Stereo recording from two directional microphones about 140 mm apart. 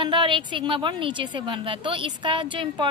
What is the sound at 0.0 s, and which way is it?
A woman's voice, 35° right (ahead or behind).